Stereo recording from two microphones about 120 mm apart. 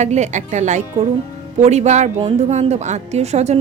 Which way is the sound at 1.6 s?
70° right (ahead or behind).